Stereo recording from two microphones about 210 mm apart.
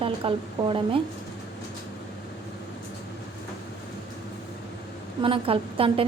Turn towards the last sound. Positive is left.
turn(degrees=-25)  # may be behind; listen again after turning